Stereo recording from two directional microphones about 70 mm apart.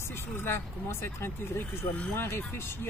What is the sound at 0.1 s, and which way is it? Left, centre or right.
Speech, left.